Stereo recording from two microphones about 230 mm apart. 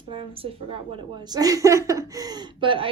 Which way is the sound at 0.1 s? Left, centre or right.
Right.